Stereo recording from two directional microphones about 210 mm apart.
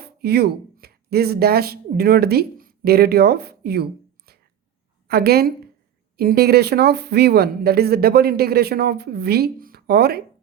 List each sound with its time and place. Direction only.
0.0 s speech: 50° right (ahead or behind)
4.3 s a sound: 50° right (ahead or behind)
5.0 s speech: 50° right (ahead or behind)